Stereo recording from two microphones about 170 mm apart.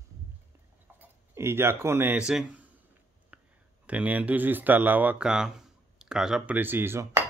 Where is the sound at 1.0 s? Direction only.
15° right (ahead or behind).